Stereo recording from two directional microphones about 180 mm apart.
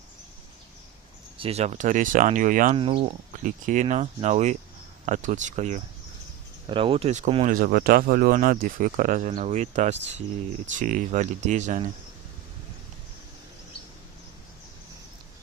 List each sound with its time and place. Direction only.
1.4 s speech: 35° right (ahead or behind)
2.7 s speech: 30° right (ahead or behind)
3.4 s speech: 45° right (ahead or behind)
6.7 s speech: 30° right (ahead or behind)
7.4 s speech: 50° right (ahead or behind)